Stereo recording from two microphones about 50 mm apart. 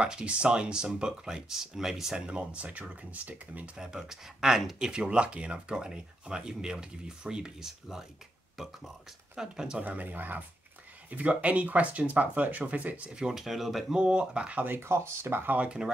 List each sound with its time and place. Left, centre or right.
0.0 s speech: right
3.7 s speech: centre
9.4 s speech: centre
9.8 s speech: right
13.3 s speech: centre
13.8 s speech: centre
14.7 s speech: right
15.6 s speech: centre